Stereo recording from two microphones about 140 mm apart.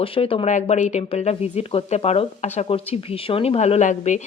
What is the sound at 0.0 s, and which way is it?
Speech, 40° left (ahead or behind).